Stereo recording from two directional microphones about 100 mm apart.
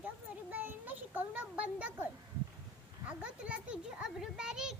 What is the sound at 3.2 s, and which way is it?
A child's voice, 10° right (ahead or behind).